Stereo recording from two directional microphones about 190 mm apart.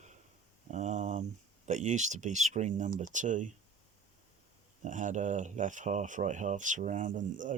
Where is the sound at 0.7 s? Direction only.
40° right (ahead or behind).